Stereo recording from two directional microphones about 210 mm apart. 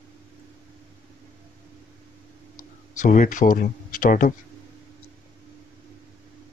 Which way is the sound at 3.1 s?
40° left (ahead or behind).